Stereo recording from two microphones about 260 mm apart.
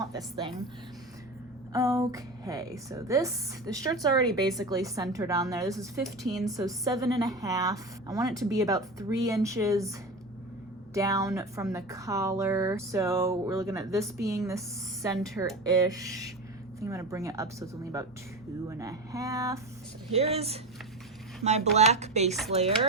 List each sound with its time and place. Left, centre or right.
0.1 s speech: centre
1.7 s speech: centre
6.0 s speech: centre
6.6 s speech: centre
10.9 s speech: centre
15.6 s speech: centre
20.1 s speech: right